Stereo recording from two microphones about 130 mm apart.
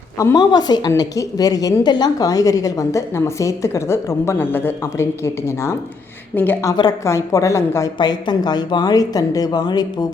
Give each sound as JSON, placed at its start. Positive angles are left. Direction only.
{"t": 0.3, "sound": "a woman's voice", "side_deg": 30}
{"t": 7.9, "sound": "speech", "side_deg": 35}